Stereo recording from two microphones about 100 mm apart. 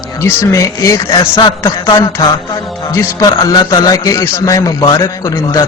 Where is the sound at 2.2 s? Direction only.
35° left (ahead or behind).